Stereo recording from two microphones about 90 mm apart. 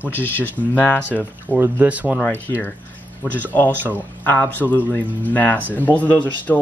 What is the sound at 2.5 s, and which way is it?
Speech, 35° left (ahead or behind).